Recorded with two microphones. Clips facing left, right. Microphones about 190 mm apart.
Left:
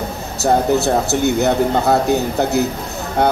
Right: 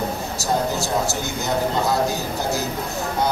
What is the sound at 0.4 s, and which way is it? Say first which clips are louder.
Speech: left 9 dB; 65° left (ahead or behind).